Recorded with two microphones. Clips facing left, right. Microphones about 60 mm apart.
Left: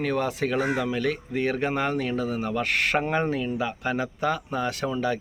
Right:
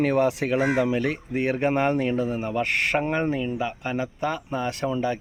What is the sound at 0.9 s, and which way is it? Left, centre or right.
Speech, right.